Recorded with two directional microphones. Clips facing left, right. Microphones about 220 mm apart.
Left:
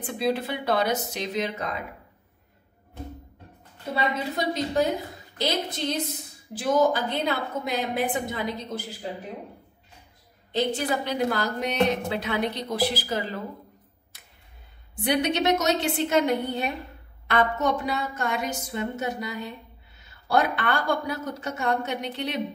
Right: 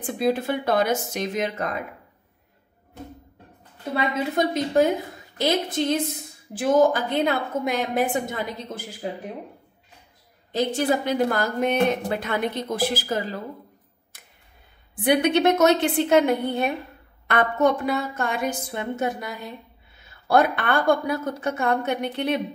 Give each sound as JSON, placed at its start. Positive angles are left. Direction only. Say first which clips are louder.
{"t": 0.0, "sound": "a woman's voice", "louder": "right 3 dB", "side_deg": -45}
{"t": 3.9, "sound": "a woman's voice", "louder": "right 3 dB", "side_deg": -50}
{"t": 10.5, "sound": "a woman's voice", "louder": "right 3 dB", "side_deg": -45}
{"t": 15.0, "sound": "a woman's voice", "louder": "right 4 dB", "side_deg": -55}